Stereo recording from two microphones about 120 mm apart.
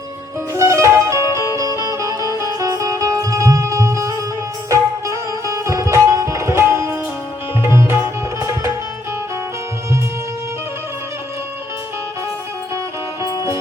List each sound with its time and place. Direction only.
0.5 s music: 25° right (ahead or behind)